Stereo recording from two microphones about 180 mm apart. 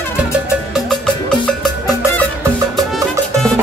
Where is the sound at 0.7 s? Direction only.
5° left (ahead or behind).